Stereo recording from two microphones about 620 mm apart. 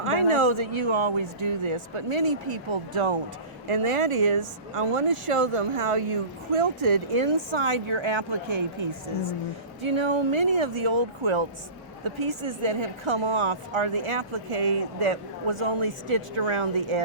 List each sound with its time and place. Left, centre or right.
0.3 s a woman's voice: right